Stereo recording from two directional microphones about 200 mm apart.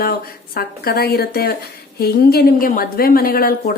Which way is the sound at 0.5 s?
50° left (ahead or behind).